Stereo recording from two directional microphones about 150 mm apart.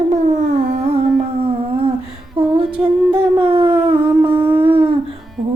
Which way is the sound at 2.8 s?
10° right (ahead or behind).